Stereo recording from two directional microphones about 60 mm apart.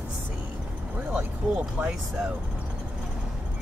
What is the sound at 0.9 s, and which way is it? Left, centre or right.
Speech, right.